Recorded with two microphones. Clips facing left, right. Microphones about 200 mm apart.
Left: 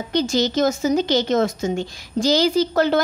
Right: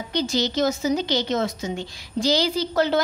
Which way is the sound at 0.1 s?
45° left (ahead or behind).